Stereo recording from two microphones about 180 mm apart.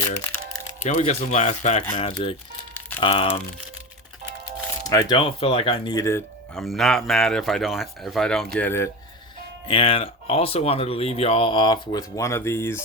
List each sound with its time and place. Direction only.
0.8 s speech: 40° left (ahead or behind)
4.9 s speech: 20° left (ahead or behind)
6.5 s a man's voice: centre (ahead or behind)
9.6 s speech: 30° left (ahead or behind); by 12.8 s 15° left (ahead or behind)